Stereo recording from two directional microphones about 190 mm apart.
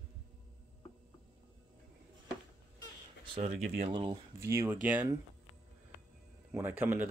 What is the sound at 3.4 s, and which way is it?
Speech, 35° right (ahead or behind).